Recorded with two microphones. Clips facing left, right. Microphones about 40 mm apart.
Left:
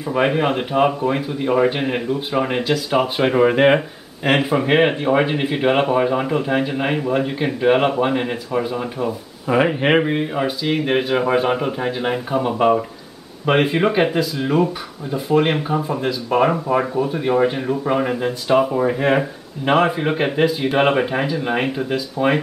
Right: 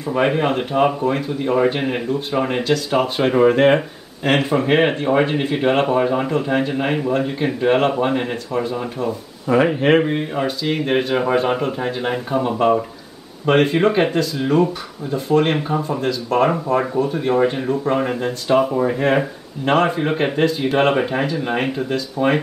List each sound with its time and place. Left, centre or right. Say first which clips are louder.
0.0 s speech: even; centre